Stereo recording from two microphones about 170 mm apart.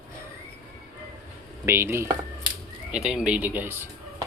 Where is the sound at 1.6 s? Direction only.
15° right (ahead or behind).